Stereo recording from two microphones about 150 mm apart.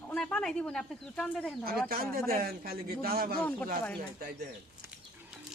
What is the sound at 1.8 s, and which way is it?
A man's voice, 80° right.